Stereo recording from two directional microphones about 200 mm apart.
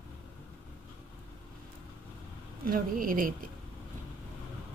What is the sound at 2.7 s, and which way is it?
Speech, 45° right (ahead or behind).